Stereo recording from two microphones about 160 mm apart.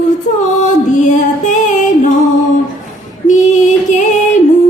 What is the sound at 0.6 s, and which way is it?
Music, 50° left (ahead or behind).